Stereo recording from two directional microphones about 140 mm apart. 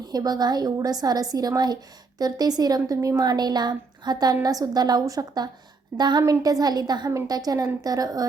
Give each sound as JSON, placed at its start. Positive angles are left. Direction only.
{"t": 0.0, "sound": "a woman's voice", "side_deg": -30}